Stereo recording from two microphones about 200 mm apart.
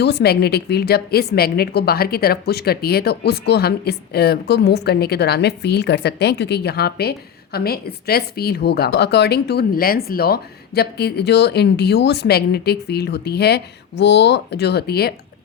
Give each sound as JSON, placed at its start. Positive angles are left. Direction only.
{"t": 0.0, "sound": "a woman's voice", "side_deg": 55}